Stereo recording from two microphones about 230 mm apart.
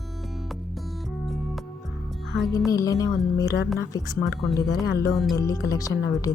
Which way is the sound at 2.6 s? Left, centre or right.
Centre.